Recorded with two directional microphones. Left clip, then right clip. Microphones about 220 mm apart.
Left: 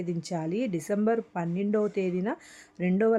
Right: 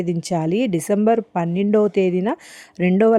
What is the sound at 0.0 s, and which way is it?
Speech, 35° right (ahead or behind).